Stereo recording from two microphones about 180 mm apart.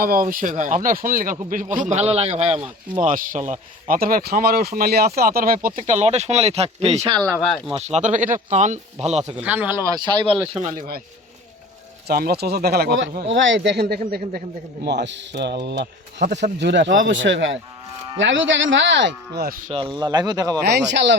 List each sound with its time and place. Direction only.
0.0 s speech: 50° right (ahead or behind)
1.8 s speech: 40° right (ahead or behind)
7.3 s speech: 5° left (ahead or behind)
7.7 s speech: 35° right (ahead or behind)
9.3 s speech: 10° right (ahead or behind); by 10.3 s 25° right (ahead or behind)
10.5 s speech: 40° right (ahead or behind)
12.0 s speech: 60° right (ahead or behind)
14.8 s speech: 75° right (ahead or behind); by 19.7 s 50° right (ahead or behind)
19.7 s speech: 25° right (ahead or behind)
20.6 s speech: 65° right (ahead or behind)